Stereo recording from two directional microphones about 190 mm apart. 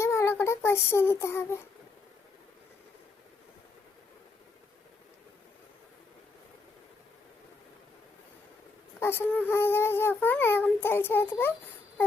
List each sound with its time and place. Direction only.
0.0 s speech: 15° left (ahead or behind)
9.0 s speech: 10° left (ahead or behind)